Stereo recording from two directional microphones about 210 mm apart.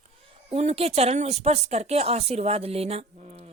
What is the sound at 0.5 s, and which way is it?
Speech, 30° right (ahead or behind).